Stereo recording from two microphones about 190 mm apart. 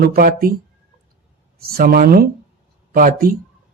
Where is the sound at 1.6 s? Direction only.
50° right (ahead or behind).